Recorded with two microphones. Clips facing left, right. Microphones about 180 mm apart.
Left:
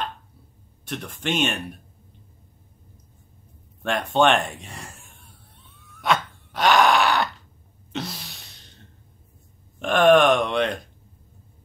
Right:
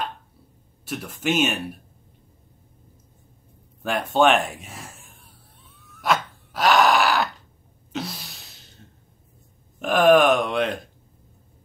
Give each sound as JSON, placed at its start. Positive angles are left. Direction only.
{"t": 0.8, "sound": "speech", "side_deg": -5}
{"t": 3.8, "sound": "a sound", "side_deg": -5}
{"t": 9.8, "sound": "speech", "side_deg": -5}